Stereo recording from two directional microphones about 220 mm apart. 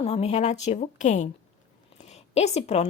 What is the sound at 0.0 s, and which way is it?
A woman's voice, 30° left (ahead or behind).